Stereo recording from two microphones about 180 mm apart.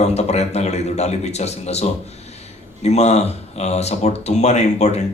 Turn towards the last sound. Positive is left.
turn(degrees=40)  # may be behind; listen again after turning